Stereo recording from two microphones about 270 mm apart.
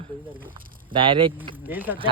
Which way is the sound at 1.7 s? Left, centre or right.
Centre.